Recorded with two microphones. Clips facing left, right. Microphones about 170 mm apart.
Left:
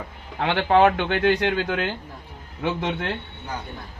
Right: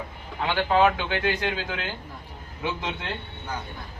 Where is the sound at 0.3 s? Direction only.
65° left (ahead or behind).